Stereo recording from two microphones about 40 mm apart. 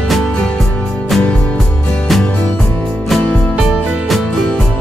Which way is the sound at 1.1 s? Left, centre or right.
Centre.